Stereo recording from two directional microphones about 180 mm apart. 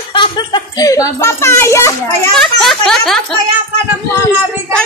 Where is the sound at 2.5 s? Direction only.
Centre (ahead or behind).